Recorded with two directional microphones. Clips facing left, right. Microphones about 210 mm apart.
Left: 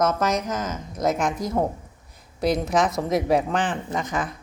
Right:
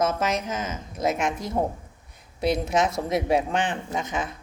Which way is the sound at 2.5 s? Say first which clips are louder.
Left 1 dB; 25° right (ahead or behind).